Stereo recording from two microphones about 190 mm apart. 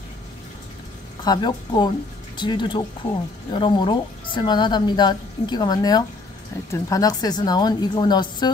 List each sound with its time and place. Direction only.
1.2 s a woman's voice: 20° left (ahead or behind)